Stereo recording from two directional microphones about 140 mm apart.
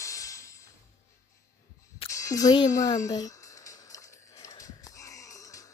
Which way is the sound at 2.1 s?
25° left (ahead or behind).